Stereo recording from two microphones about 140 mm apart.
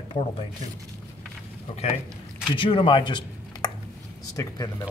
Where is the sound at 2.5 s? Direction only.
40° left (ahead or behind).